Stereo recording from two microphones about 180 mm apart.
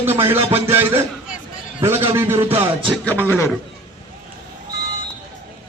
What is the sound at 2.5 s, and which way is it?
Music, 30° right (ahead or behind).